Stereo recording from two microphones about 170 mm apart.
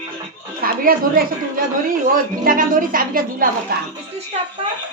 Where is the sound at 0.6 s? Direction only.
60° right (ahead or behind).